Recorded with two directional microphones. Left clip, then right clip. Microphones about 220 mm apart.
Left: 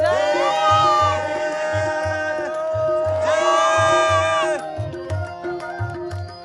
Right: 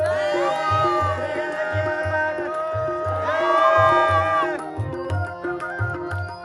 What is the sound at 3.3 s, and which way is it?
Music, 5° right (ahead or behind).